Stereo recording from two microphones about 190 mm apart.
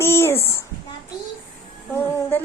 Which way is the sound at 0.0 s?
15° left (ahead or behind).